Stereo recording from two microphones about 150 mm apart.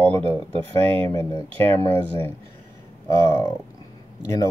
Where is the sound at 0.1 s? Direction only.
40° right (ahead or behind).